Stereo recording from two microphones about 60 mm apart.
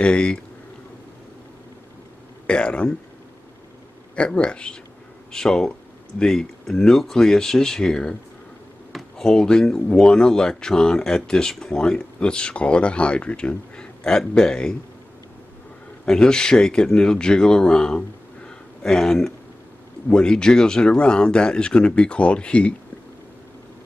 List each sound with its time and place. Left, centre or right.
0.0 s speech: centre
2.4 s speech: centre
4.1 s speech: centre
16.1 s speech: centre